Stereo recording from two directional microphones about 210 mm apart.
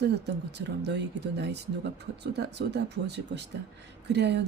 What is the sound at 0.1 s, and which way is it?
Speech, 55° right (ahead or behind).